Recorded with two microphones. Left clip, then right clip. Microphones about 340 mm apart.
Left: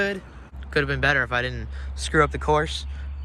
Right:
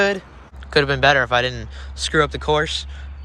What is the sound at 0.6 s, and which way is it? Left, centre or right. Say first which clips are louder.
Speech: right 7 dB; centre.